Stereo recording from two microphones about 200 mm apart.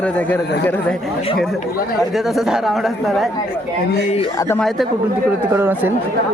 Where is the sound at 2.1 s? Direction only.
Centre (ahead or behind).